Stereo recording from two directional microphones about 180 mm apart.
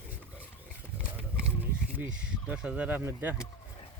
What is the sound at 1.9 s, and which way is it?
Speech, 5° right (ahead or behind).